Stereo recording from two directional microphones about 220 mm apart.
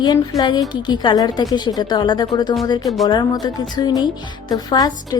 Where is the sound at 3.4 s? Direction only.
20° left (ahead or behind).